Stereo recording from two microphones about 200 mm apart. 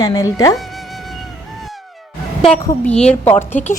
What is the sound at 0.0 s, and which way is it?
Speech, 20° left (ahead or behind).